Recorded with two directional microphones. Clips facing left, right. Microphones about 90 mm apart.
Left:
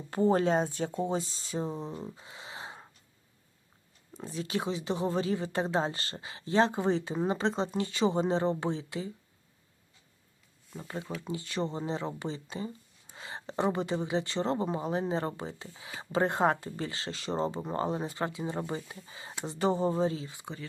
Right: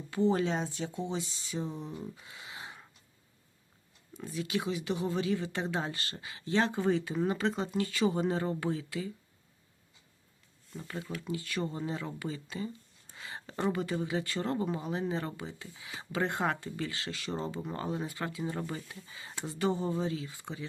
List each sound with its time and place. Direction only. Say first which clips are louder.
0.1 s speech: left 3 dB; 45° left (ahead or behind)
2.0 s a sound: left 1 dB; 30° left (ahead or behind)
4.1 s speech: even; 35° left (ahead or behind)
10.8 s speech: left 1 dB; 25° left (ahead or behind)
13.1 s a sound: left 3 dB; 25° left (ahead or behind)
13.7 s speech: left 1 dB; 25° left (ahead or behind)